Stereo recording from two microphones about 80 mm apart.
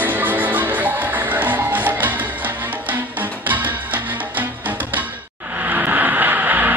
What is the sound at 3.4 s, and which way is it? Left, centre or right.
Music, right.